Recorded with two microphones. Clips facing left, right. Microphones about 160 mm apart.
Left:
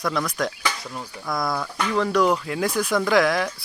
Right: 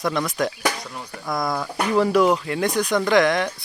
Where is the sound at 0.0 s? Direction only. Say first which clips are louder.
Right 2 dB; centre (ahead or behind).